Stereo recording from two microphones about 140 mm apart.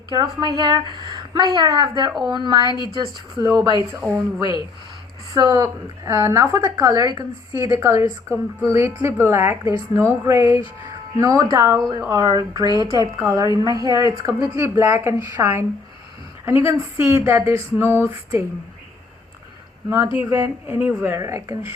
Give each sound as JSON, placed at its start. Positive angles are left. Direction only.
{"t": 0.1, "sound": "a woman's voice", "side_deg": -30}
{"t": 19.9, "sound": "a woman's voice", "side_deg": -20}